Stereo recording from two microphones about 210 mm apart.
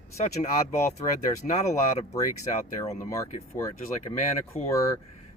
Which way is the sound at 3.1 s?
15° left (ahead or behind).